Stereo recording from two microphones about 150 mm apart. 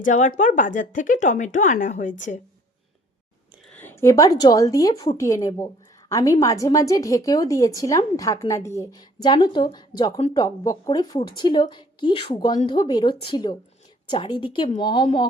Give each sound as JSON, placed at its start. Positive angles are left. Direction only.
{"t": 0.0, "sound": "speech", "side_deg": 55}
{"t": 3.7, "sound": "a woman's voice", "side_deg": 15}